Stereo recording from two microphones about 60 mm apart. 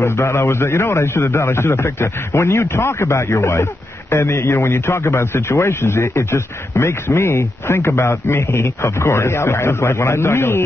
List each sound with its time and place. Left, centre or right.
0.0 s speech: left